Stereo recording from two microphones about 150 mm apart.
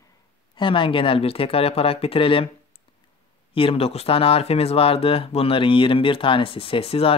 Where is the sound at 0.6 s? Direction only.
35° left (ahead or behind).